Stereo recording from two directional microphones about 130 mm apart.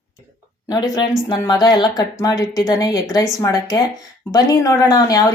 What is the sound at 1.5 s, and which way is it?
Speech, 30° left (ahead or behind).